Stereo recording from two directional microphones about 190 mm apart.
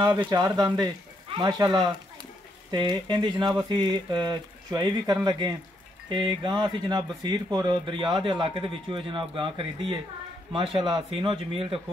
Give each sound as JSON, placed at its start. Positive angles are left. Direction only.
{"t": 0.2, "sound": "speech", "side_deg": -20}